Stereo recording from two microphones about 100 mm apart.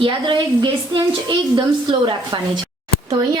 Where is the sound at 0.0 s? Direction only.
55° right (ahead or behind).